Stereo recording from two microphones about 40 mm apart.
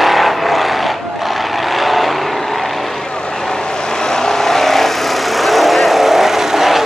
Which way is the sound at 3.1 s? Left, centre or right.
Left.